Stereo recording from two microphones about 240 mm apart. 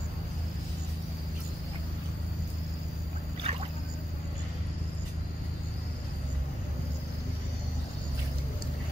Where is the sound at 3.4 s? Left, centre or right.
Right.